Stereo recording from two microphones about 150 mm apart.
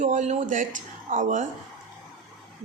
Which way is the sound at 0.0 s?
55° right (ahead or behind).